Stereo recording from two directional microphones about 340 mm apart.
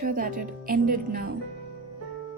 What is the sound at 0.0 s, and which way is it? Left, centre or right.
Speech, right.